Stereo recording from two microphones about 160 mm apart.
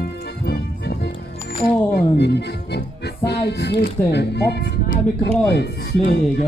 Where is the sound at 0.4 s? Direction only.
90° left.